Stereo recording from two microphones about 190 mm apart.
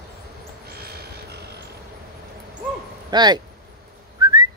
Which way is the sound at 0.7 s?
55° right (ahead or behind).